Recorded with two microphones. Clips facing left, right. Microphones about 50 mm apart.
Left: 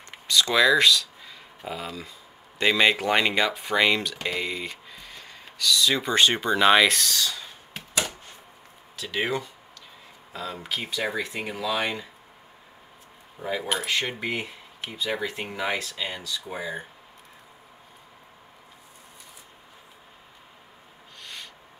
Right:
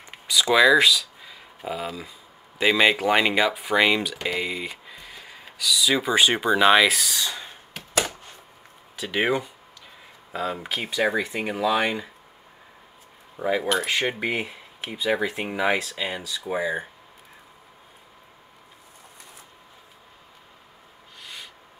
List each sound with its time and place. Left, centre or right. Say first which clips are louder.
0.3 s speech: right 3 dB; centre
7.2 s speech: even; right
8.9 s speech: right 4 dB; centre
13.8 s speech: right 3 dB; centre
16.3 s speech: right 3 dB; right
16.5 s speech: right 8 dB; centre
21.2 s a sound: even; centre